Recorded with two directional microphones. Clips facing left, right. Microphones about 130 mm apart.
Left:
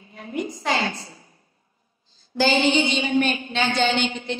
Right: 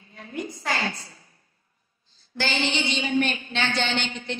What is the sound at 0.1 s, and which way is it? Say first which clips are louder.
A woman's voice: left 5 dB; 15° left (ahead or behind).